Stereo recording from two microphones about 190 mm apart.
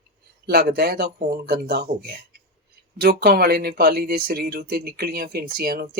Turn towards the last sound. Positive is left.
turn(degrees=-55)  # may be behind; listen again after turning